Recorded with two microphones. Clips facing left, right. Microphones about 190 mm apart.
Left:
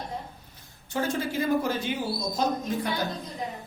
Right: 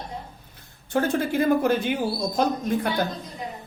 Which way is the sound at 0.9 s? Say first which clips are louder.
Right 5 dB; 55° right (ahead or behind).